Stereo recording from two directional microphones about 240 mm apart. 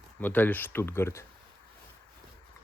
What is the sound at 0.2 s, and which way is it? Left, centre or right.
Speech, centre.